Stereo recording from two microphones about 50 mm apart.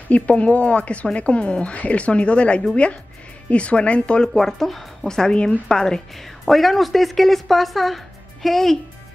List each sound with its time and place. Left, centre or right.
0.1 s speech: left
4.3 s speech: centre
6.4 s a woman's voice: centre